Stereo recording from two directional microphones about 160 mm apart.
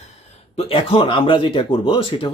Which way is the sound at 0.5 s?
35° left (ahead or behind).